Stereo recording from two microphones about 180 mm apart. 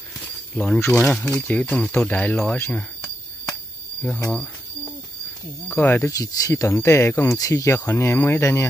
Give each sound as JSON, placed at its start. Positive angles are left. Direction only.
{"t": 0.6, "sound": "speech", "side_deg": 5}
{"t": 4.3, "sound": "cricket", "side_deg": 5}
{"t": 5.7, "sound": "speech", "side_deg": 10}